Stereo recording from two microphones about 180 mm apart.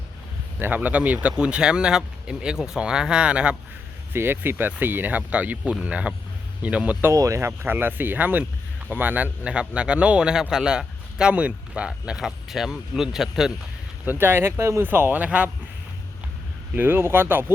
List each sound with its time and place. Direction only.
0.6 s a man's voice: 10° right (ahead or behind)
16.7 s speech: 10° right (ahead or behind)